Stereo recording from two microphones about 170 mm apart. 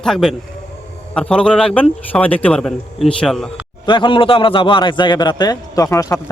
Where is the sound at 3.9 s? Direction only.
30° left (ahead or behind).